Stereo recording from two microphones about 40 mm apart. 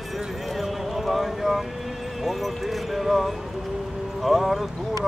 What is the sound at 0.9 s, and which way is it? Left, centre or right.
Clip-clop, centre.